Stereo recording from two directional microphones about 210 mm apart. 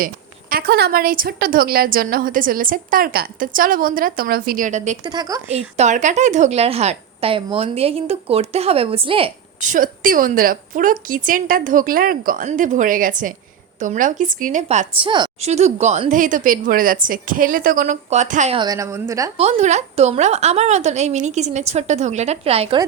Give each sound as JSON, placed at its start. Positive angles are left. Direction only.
{"t": 0.5, "sound": "a woman's voice", "side_deg": -50}
{"t": 5.0, "sound": "a woman's voice", "side_deg": -20}
{"t": 5.5, "sound": "a woman's voice", "side_deg": -30}
{"t": 9.6, "sound": "a woman's voice", "side_deg": -40}
{"t": 19.4, "sound": "a woman's voice", "side_deg": -30}